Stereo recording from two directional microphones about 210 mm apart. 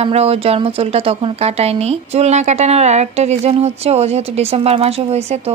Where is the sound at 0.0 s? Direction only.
30° right (ahead or behind).